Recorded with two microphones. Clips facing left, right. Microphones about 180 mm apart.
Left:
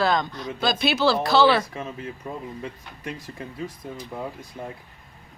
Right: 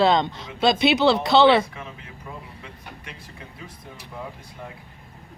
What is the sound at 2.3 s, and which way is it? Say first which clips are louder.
Speech: left 3 dB; 35° left (ahead or behind).